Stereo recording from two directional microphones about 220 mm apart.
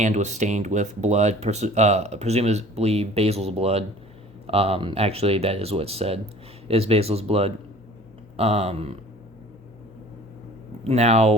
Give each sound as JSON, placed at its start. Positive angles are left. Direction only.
{"t": 0.0, "sound": "speech", "side_deg": -30}
{"t": 10.8, "sound": "speech", "side_deg": -30}